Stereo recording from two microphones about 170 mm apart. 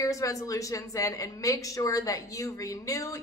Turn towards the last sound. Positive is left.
turn(degrees=20)  # may be behind; listen again after turning